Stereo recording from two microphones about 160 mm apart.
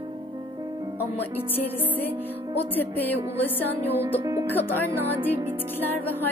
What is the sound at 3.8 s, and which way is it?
Music, 15° right (ahead or behind).